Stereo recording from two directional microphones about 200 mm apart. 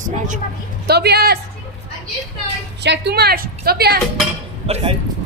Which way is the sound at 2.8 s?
55° right (ahead or behind).